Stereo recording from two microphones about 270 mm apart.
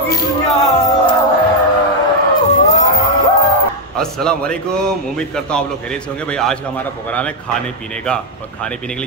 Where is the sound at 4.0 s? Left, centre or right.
Centre.